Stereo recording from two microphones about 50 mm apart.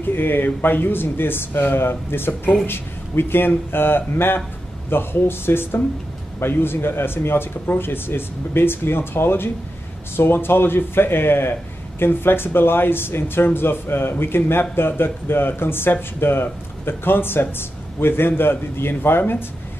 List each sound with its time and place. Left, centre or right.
0.1 s speech: left